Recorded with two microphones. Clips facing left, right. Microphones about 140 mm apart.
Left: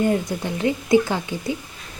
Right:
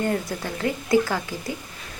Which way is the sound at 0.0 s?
20° left (ahead or behind).